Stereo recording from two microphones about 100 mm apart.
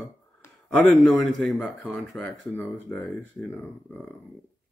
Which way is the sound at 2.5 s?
20° left (ahead or behind).